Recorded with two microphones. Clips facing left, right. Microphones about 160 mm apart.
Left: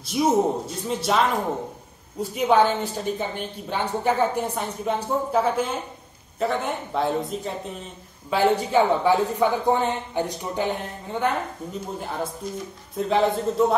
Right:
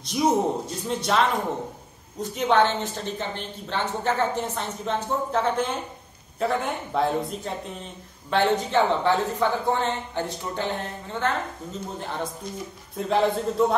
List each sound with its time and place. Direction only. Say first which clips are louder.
0.1 s speech: left 2 dB; 5° left (ahead or behind)